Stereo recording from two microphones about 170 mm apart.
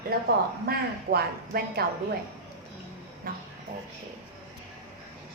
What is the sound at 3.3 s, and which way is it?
Speech, 60° right (ahead or behind).